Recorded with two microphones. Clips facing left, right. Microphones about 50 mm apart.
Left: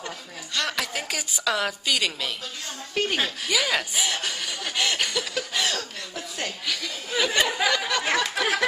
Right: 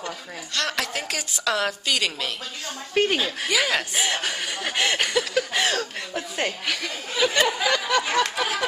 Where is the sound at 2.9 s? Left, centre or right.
Centre.